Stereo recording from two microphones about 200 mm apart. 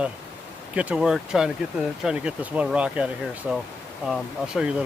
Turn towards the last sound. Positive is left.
turn(degrees=0)  # may be behind; listen again after turning